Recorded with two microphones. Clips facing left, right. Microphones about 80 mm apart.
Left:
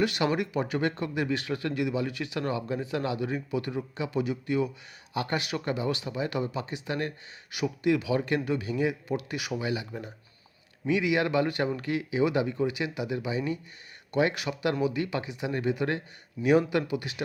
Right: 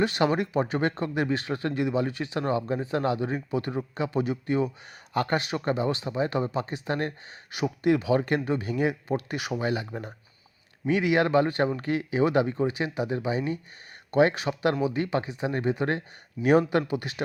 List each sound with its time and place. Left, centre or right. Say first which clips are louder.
0.0 s a man's voice: right 2 dB; right
5.1 s speech: right 4 dB; right
5.4 s a man's voice: right 3 dB; right
8.7 s a man's voice: right 2 dB; right
16.4 s a man's voice: right 2 dB; right